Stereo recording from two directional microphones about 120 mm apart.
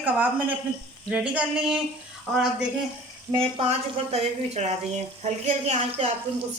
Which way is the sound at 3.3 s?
60° right (ahead or behind).